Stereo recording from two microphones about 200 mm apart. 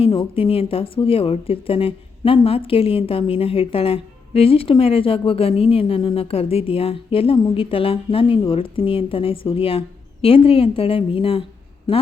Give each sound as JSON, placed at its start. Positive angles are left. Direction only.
{"t": 0.0, "sound": "speech", "side_deg": 30}